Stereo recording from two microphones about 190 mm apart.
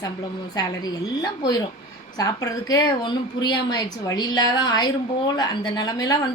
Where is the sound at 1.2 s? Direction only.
20° left (ahead or behind).